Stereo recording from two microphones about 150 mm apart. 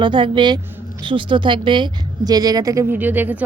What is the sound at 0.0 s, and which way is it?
A woman's voice, 35° right (ahead or behind).